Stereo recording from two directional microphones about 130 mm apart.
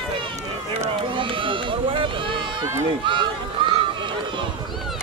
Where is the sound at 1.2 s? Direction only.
40° right (ahead or behind).